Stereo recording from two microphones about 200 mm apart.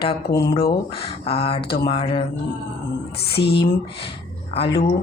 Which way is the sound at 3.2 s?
55° left (ahead or behind).